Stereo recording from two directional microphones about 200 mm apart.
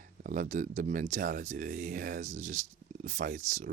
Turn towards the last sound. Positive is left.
turn(degrees=-40)  # may be behind; listen again after turning